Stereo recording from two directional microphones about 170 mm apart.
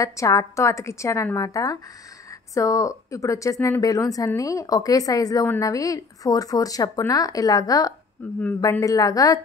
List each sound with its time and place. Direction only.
0.0 s a woman's voice: 20° left (ahead or behind)
8.2 s a woman's voice: 10° left (ahead or behind)
8.5 s a woman's voice: 20° left (ahead or behind)